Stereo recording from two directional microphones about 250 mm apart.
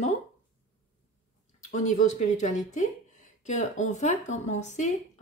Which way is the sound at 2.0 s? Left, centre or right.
Left.